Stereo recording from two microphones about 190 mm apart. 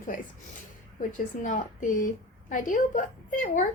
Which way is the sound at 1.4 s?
45° left (ahead or behind).